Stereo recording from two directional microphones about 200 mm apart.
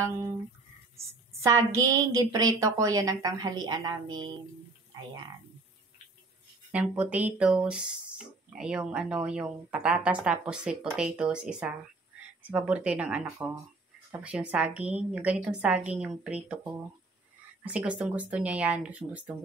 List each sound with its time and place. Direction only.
1.4 s a woman's voice: 15° right (ahead or behind)
6.7 s a woman's voice: 5° right (ahead or behind)